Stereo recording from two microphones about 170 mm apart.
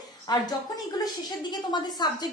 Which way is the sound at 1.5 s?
25° left (ahead or behind).